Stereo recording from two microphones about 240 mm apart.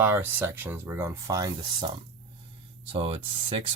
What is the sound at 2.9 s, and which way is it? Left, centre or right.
Speech, right.